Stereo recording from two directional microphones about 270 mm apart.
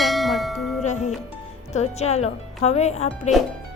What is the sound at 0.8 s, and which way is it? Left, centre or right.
Speech, left.